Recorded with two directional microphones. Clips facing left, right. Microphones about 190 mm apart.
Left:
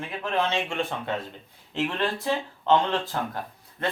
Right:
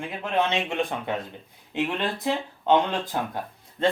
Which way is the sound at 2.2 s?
15° right (ahead or behind).